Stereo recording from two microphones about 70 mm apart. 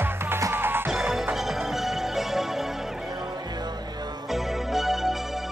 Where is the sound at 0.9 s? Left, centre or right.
Centre.